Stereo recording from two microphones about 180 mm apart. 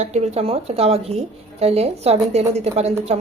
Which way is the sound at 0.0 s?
40° right (ahead or behind).